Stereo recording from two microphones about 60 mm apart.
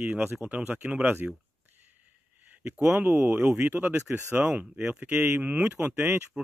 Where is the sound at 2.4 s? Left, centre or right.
Right.